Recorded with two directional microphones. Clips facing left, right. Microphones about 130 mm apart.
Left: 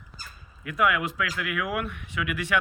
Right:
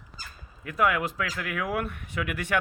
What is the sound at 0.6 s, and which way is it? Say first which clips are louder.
Speech: even; 40° right (ahead or behind).